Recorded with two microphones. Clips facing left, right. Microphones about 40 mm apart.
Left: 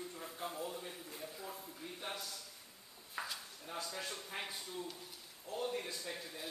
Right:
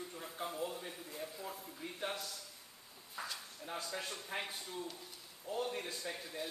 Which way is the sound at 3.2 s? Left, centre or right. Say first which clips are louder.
Left 1 dB; left.